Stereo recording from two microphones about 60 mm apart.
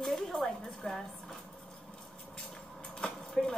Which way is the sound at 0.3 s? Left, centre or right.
Centre.